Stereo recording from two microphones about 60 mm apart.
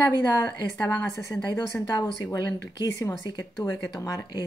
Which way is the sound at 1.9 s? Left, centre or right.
Left.